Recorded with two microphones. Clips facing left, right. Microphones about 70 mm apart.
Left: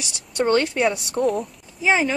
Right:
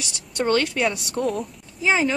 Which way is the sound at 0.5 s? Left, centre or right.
Left.